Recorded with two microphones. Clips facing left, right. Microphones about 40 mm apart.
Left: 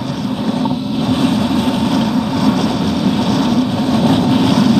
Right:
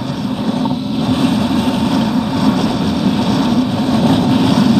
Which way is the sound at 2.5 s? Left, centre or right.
Right.